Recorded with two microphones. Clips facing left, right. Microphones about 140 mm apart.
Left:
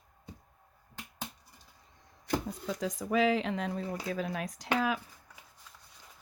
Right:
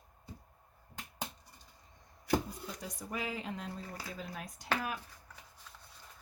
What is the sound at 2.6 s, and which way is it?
Speech, 90° left.